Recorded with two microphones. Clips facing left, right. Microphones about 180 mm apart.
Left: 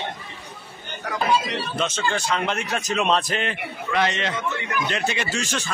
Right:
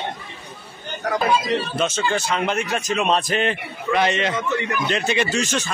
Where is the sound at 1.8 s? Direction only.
5° right (ahead or behind).